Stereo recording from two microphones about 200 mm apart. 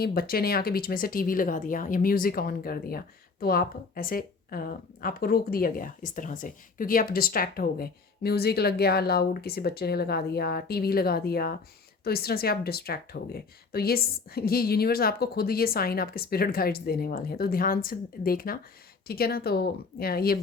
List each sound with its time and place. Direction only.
0.0 s speech: 50° left (ahead or behind)